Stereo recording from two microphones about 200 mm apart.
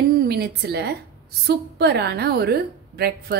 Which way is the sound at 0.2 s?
55° right (ahead or behind).